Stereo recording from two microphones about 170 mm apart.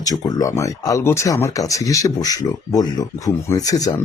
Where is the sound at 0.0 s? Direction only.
20° left (ahead or behind).